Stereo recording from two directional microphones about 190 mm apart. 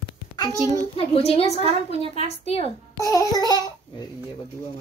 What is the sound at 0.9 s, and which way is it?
A woman's voice, 30° left (ahead or behind).